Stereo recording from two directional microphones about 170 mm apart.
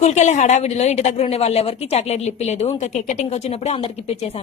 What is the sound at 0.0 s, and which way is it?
A woman's voice, 40° left (ahead or behind).